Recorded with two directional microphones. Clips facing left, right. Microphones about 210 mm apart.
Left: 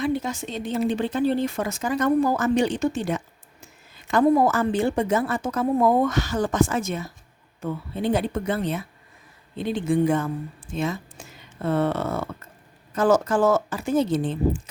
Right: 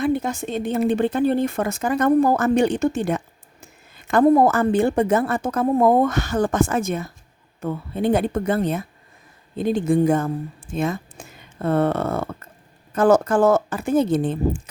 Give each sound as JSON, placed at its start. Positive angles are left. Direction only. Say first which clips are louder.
{"t": 0.0, "sound": "speech", "louder": "right 3 dB", "side_deg": -55}